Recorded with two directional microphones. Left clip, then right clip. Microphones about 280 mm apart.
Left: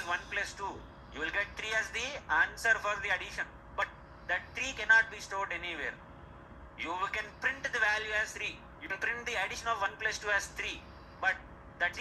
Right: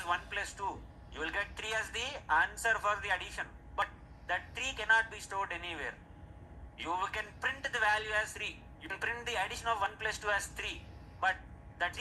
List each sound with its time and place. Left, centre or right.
0.1 s a man's voice: centre